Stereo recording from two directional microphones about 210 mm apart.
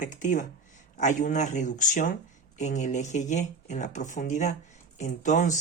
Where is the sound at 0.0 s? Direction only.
35° left (ahead or behind).